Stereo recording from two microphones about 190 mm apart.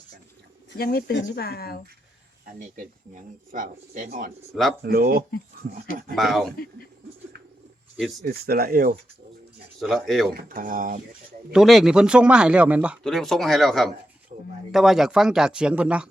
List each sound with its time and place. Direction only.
0.7 s speech: 55° left (ahead or behind)
3.5 s speech: 45° right (ahead or behind)
4.8 s speech: 55° right (ahead or behind)
6.1 s speech: centre (ahead or behind)
8.2 s speech: 55° right (ahead or behind)
9.8 s speech: centre (ahead or behind)
10.3 s speech: 45° right (ahead or behind)
11.5 s speech: centre (ahead or behind)
14.3 s speech: 40° right (ahead or behind)
14.7 s speech: centre (ahead or behind)